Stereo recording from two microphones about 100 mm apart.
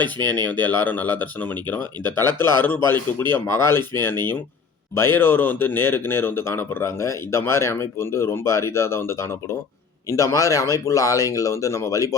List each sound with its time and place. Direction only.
0.0 s a man's voice: 15° left (ahead or behind); by 12.1 s 35° left (ahead or behind)